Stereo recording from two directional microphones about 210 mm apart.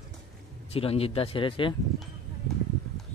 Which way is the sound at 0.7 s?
25° left (ahead or behind).